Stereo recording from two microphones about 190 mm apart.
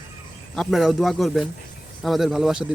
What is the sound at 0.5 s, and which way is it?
Speech, centre (ahead or behind).